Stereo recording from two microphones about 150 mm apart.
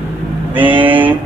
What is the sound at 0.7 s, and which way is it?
Speech, 35° right (ahead or behind).